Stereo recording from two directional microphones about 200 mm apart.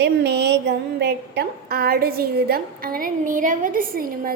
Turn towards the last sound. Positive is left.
turn(degrees=-45)  # may be behind; listen again after turning